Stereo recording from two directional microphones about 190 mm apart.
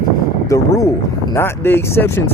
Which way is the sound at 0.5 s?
15° left (ahead or behind).